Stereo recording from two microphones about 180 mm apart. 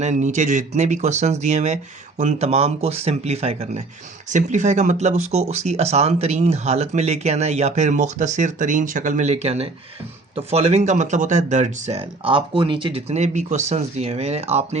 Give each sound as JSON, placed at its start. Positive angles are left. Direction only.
{"t": 0.0, "sound": "speech", "side_deg": -40}